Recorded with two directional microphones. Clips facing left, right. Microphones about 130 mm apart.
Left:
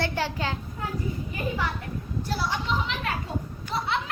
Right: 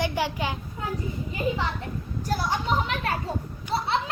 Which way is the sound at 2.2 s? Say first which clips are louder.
Right 3 dB; 45° right (ahead or behind).